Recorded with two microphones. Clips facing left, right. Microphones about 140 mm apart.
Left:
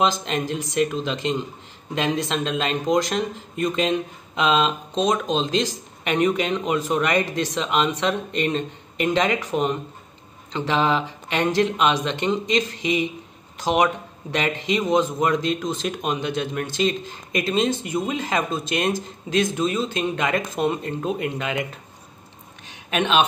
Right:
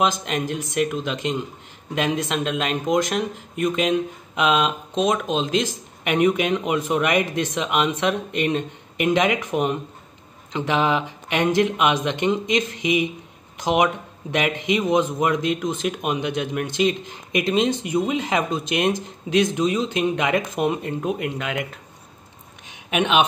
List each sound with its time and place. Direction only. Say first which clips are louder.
0.1 s speech: even; 5° right (ahead or behind)
22.8 s speech: right 1 dB; 15° right (ahead or behind)